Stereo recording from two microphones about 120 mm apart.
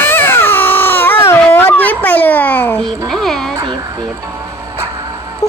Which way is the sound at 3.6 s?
35° right (ahead or behind).